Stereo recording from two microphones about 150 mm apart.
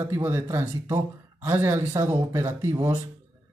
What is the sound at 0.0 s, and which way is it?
Speech, 15° right (ahead or behind).